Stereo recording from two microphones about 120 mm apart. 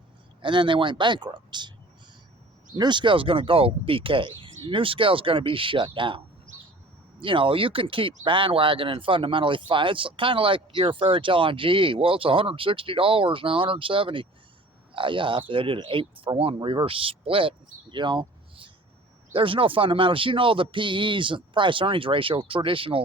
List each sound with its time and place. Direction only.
0.4 s speech: 45° right (ahead or behind)
2.7 s speech: 40° right (ahead or behind)